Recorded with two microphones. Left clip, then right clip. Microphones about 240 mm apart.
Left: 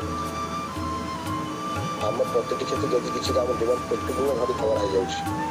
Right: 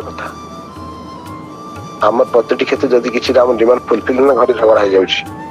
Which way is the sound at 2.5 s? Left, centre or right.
Right.